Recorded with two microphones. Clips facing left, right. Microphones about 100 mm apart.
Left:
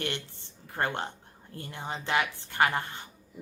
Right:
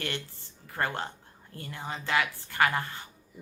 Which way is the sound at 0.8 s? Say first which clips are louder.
Left 1 dB; 25° left (ahead or behind).